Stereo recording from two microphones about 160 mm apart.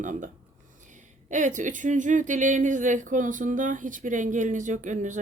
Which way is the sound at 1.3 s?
50° right (ahead or behind).